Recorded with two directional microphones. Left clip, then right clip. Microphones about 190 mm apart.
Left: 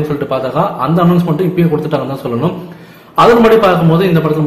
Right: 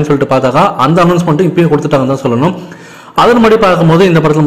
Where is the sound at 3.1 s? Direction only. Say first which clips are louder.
Even; 40° right (ahead or behind).